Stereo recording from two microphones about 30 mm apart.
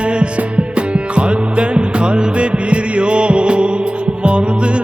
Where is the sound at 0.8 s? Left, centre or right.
Right.